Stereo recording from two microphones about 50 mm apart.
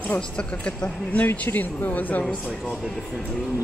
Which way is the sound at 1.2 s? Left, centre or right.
Left.